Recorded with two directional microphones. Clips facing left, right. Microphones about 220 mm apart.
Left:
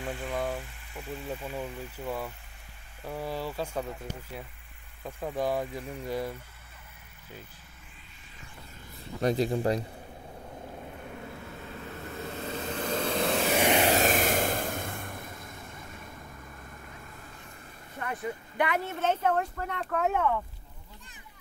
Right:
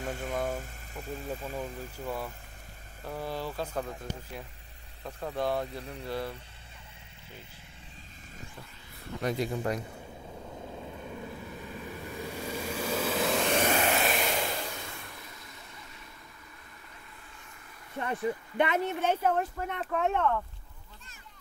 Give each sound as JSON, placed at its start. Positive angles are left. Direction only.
{"t": 0.0, "sound": "speech", "side_deg": -45}
{"t": 1.0, "sound": "speech", "side_deg": 5}
{"t": 9.2, "sound": "speech", "side_deg": 30}
{"t": 11.6, "sound": "vehicle", "side_deg": -15}
{"t": 13.8, "sound": "vehicle", "side_deg": 40}
{"t": 17.9, "sound": "speech", "side_deg": -25}